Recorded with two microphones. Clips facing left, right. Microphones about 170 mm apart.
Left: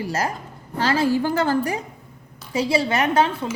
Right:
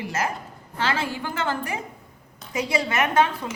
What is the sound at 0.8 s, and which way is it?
A woman's voice, 35° left (ahead or behind).